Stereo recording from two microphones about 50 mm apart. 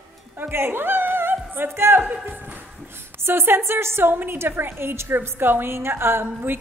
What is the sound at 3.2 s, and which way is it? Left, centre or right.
A woman's voice, right.